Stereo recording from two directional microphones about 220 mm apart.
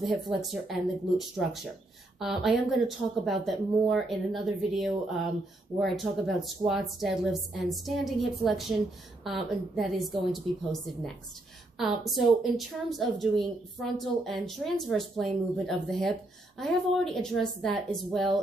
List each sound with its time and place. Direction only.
0.4 s a woman's voice: centre (ahead or behind)